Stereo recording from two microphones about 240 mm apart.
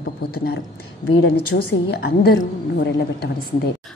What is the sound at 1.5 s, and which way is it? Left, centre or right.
A woman's voice, left.